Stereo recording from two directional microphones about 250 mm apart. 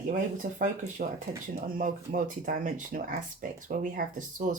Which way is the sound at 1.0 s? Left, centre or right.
Right.